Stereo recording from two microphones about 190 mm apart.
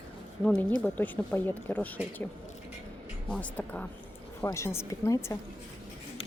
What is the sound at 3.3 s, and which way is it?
Speech, 10° left (ahead or behind).